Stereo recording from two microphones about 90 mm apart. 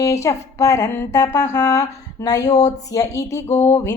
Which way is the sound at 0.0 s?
35° left (ahead or behind).